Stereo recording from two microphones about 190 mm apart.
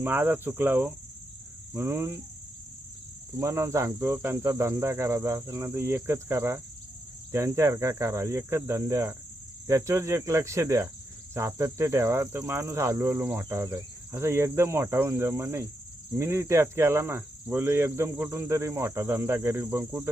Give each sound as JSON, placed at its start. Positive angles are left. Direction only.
{"t": 0.0, "sound": "cricket", "side_deg": -10}
{"t": 3.3, "sound": "cricket", "side_deg": -15}